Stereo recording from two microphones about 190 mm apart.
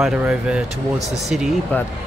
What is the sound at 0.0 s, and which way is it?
Speech, 5° right (ahead or behind).